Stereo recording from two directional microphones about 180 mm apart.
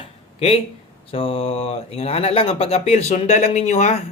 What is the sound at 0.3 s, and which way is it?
Speech, 35° left (ahead or behind).